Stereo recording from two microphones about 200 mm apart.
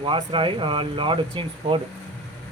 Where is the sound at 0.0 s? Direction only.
25° right (ahead or behind).